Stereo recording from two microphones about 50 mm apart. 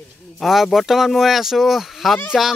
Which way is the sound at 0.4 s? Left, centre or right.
Centre.